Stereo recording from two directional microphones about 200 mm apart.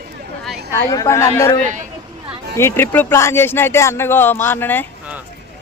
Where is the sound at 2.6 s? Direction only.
10° left (ahead or behind).